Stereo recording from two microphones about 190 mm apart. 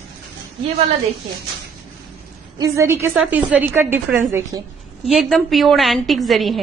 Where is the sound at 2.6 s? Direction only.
15° right (ahead or behind).